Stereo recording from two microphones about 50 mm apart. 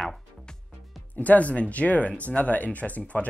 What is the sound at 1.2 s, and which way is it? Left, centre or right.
Speech, left.